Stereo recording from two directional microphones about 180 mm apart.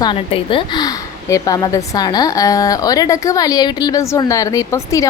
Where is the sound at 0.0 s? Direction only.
30° left (ahead or behind).